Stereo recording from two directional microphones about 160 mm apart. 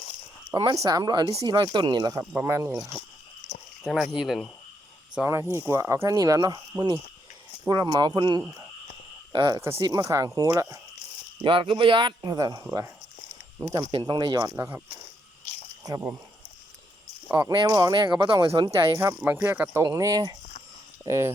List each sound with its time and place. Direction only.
0.5 s speech: 25° right (ahead or behind)
3.8 s speech: centre (ahead or behind)
5.1 s speech: 15° right (ahead or behind)
11.4 s speech: 30° right (ahead or behind)
17.2 s speech: 20° right (ahead or behind)